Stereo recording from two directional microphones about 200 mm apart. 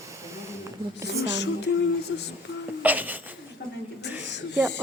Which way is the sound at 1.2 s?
60° left (ahead or behind).